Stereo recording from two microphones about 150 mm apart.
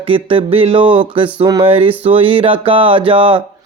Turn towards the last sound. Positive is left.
turn(degrees=-35)  # may be behind; listen again after turning